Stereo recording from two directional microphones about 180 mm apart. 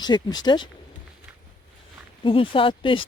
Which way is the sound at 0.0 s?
25° left (ahead or behind).